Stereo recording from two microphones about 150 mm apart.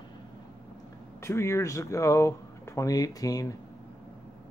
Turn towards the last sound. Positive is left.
turn(degrees=25)  # may be behind; listen again after turning